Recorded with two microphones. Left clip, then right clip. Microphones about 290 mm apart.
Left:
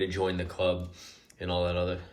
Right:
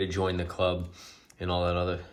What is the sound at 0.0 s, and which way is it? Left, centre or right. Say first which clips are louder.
Speech: even; right.